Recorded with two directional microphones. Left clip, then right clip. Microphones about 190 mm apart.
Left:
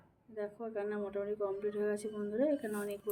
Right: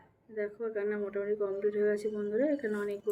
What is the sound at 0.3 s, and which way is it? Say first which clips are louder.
Speech: right 5 dB; 45° left (ahead or behind).